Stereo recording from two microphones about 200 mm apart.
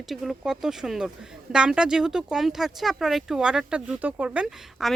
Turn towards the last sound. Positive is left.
turn(degrees=-5)  # may be behind; listen again after turning